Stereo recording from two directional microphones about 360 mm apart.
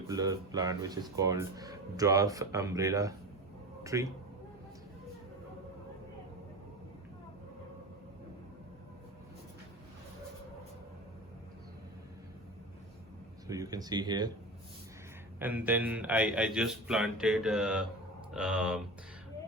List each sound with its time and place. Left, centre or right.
0.1 s speech: centre
13.5 s speech: centre
15.4 s a man's voice: centre